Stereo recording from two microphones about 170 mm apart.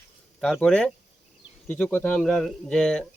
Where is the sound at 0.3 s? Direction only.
Centre (ahead or behind).